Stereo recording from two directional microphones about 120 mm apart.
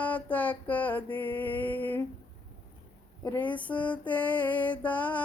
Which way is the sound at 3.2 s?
15° left (ahead or behind).